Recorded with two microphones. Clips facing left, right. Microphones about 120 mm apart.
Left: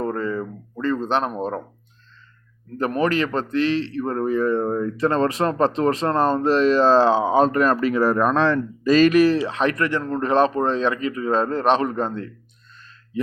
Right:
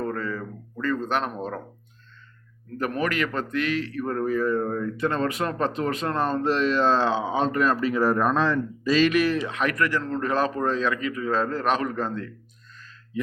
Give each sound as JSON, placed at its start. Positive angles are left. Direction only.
{"t": 0.0, "sound": "a sound", "side_deg": 25}
{"t": 1.4, "sound": "a man's voice", "side_deg": 25}
{"t": 2.7, "sound": "a man's voice", "side_deg": 30}